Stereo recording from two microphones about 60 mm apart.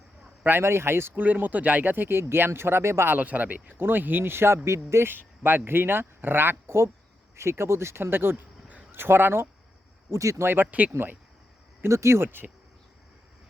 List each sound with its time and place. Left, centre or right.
0.6 s speech: right
1.2 s speech: right
3.2 s speech: right
5.1 s speech: right
10.1 s speech: right
10.4 s speech: right
10.7 s speech: right
11.9 s speech: right